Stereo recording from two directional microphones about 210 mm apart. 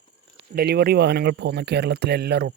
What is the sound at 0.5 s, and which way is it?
Speech, 50° right (ahead or behind).